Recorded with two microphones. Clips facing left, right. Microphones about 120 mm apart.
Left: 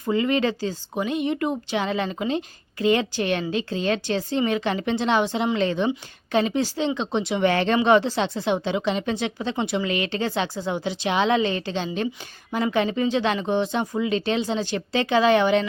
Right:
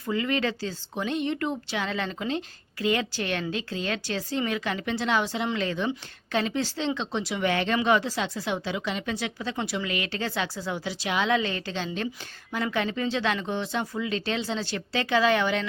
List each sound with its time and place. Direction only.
0.0 s a woman's voice: 25° left (ahead or behind)
7.4 s a woman's voice: 35° left (ahead or behind)